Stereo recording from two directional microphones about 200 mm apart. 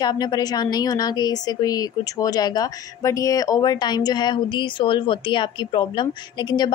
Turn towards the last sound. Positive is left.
turn(degrees=20)  # may be behind; listen again after turning